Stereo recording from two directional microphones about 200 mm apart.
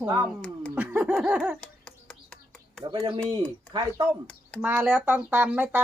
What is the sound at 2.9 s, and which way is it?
Speech, 25° right (ahead or behind).